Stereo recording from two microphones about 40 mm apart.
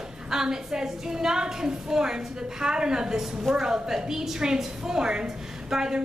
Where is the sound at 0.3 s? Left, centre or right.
Centre.